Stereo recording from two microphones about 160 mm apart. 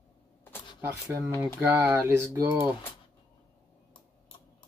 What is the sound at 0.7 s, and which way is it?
Speech, 15° right (ahead or behind).